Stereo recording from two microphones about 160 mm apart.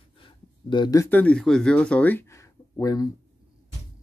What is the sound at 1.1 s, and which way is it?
Speech, 5° left (ahead or behind).